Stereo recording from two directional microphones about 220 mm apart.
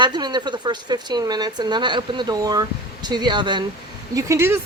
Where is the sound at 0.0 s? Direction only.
20° right (ahead or behind).